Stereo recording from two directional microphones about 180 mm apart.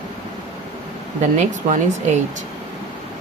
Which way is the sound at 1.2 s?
40° right (ahead or behind).